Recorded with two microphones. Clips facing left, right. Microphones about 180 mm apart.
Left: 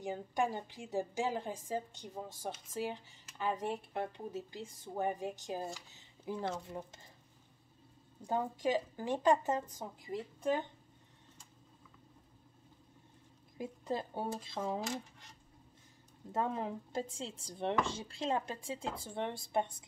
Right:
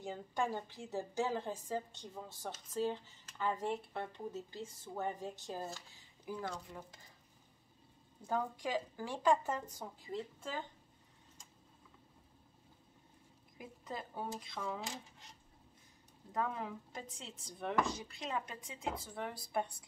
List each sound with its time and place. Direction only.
0.0 s a woman's voice: 15° left (ahead or behind)
8.2 s speech: 20° left (ahead or behind)
13.6 s speech: 30° left (ahead or behind)
16.3 s speech: 30° left (ahead or behind)